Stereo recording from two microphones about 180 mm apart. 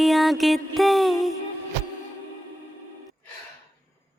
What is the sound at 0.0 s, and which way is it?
Music, centre (ahead or behind).